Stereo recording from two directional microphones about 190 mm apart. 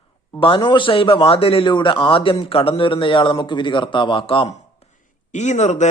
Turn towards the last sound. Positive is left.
turn(degrees=35)  # may be behind; listen again after turning